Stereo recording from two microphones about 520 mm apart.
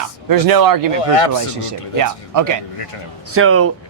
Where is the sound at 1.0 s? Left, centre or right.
Left.